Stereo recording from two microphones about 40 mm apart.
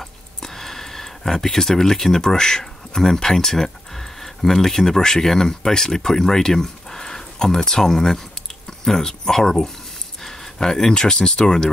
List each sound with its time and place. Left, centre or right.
0.0 s speech: centre